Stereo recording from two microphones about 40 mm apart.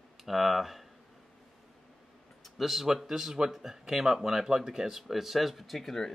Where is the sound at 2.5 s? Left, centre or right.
Centre.